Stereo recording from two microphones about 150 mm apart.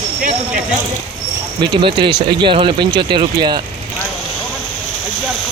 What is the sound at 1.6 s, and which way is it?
Speech, 35° right (ahead or behind).